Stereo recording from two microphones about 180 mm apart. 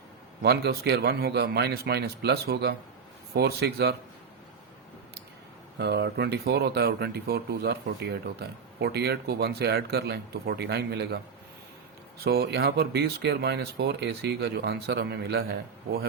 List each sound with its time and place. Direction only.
0.4 s speech: 65° right (ahead or behind)
5.7 s speech: 65° right (ahead or behind)
12.2 s speech: 60° right (ahead or behind)